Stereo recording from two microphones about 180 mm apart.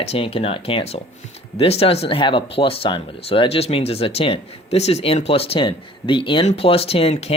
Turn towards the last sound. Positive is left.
turn(degrees=35)  # may be behind; listen again after turning